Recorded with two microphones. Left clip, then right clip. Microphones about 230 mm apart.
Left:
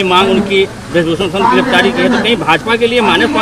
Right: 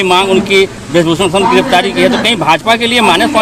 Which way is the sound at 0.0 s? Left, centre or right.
Right.